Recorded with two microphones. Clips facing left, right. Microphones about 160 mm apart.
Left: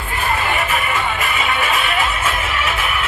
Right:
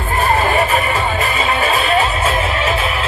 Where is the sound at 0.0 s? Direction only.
40° right (ahead or behind).